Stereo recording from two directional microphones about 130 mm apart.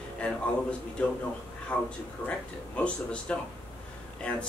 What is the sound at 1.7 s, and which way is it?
Speech, 15° left (ahead or behind).